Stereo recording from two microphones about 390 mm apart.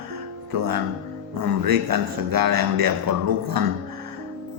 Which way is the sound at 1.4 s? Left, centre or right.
Right.